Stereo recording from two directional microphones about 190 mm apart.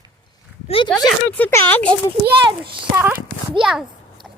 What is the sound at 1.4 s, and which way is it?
Speech, 10° left (ahead or behind).